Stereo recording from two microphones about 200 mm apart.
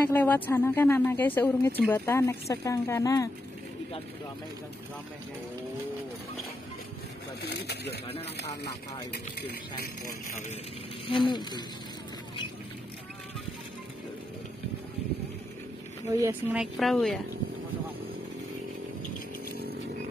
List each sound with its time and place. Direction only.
0.1 s speech: 10° left (ahead or behind)
7.4 s speech: 55° left (ahead or behind)
11.1 s insect: 25° left (ahead or behind)
16.1 s speech: 15° right (ahead or behind)
16.7 s a woman's voice: centre (ahead or behind)